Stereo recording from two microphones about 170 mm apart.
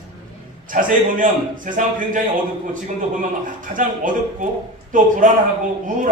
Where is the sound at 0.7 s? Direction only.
50° right (ahead or behind).